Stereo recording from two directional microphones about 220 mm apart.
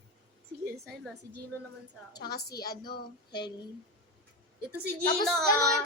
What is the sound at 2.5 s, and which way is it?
Speech, 45° left (ahead or behind).